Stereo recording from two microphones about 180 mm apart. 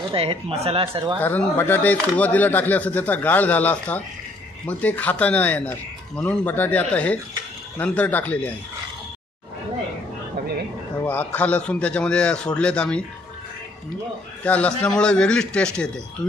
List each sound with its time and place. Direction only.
0.1 s speech: 30° right (ahead or behind)
1.2 s speech: 10° left (ahead or behind)
11.0 s speech: 10° left (ahead or behind)
14.4 s speech: 10° left (ahead or behind)